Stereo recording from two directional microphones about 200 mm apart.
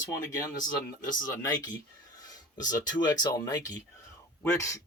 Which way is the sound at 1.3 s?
20° left (ahead or behind).